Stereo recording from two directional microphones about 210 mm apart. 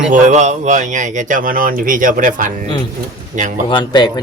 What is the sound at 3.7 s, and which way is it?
Speech, 20° left (ahead or behind).